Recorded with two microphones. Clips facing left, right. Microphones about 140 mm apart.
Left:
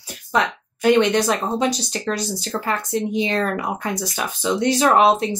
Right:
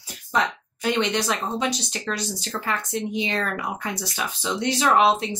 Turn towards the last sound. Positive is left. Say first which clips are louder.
# left 3 dB
turn(degrees=45)  # may be behind; listen again after turning